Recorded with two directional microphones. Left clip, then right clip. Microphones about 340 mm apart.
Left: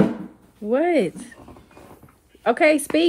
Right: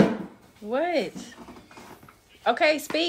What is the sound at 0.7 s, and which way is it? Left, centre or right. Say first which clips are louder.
Speech: left 6 dB; left.